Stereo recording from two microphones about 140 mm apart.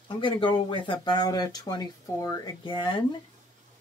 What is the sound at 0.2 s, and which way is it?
Speech, 35° left (ahead or behind).